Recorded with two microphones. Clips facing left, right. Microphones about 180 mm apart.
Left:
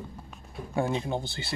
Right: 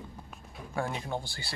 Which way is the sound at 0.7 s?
25° left (ahead or behind).